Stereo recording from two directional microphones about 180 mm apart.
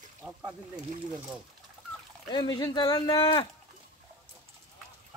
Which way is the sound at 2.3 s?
25° left (ahead or behind).